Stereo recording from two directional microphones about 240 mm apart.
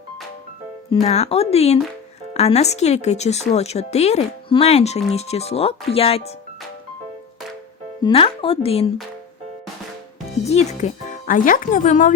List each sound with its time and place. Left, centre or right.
1.0 s speech: left
8.0 s speech: left
10.4 s speech: left